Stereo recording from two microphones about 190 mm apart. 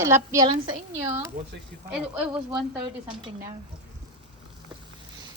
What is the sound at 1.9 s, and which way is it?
Speech, 5° right (ahead or behind).